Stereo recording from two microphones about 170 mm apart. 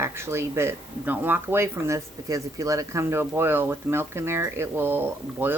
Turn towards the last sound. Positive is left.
turn(degrees=-10)  # may be behind; listen again after turning